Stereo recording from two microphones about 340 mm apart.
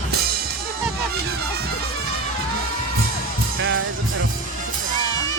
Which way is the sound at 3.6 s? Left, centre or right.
Right.